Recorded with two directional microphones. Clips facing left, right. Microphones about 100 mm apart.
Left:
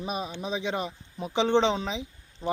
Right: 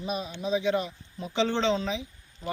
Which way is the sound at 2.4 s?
35° left (ahead or behind).